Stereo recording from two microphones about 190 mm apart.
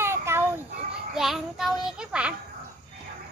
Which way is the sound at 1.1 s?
Centre (ahead or behind).